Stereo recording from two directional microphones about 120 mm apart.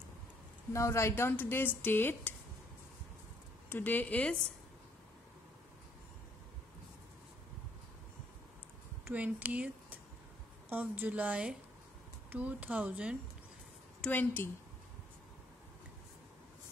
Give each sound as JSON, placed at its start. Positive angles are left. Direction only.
{"t": 0.7, "sound": "speech", "side_deg": 25}
{"t": 3.6, "sound": "speech", "side_deg": 15}
{"t": 9.0, "sound": "speech", "side_deg": -15}
{"t": 14.0, "sound": "speech", "side_deg": 15}